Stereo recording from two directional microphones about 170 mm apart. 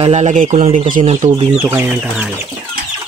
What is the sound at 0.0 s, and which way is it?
Speech, 40° right (ahead or behind).